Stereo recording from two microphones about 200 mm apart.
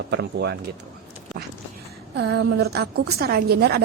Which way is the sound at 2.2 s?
60° right (ahead or behind).